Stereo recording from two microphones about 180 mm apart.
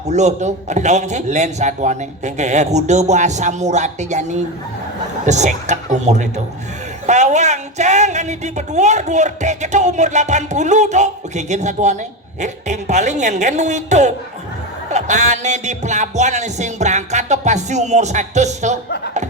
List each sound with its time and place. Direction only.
0.1 s a man's voice: 40° right (ahead or behind)